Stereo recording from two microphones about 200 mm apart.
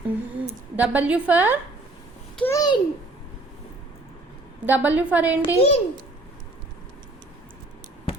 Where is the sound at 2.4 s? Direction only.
15° left (ahead or behind).